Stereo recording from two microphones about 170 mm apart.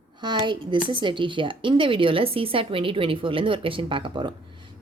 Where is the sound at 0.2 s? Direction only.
25° right (ahead or behind).